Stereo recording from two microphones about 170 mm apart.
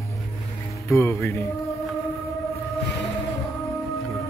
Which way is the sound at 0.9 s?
15° left (ahead or behind).